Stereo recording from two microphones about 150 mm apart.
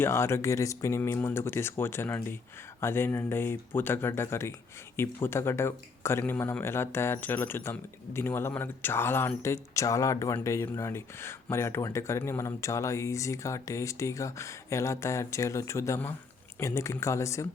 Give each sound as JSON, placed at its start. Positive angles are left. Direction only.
{"t": 0.0, "sound": "speech", "side_deg": 15}